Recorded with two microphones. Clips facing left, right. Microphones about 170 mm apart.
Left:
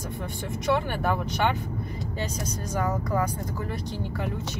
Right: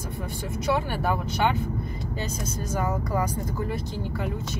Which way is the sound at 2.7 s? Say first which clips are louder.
Even; 5° right (ahead or behind).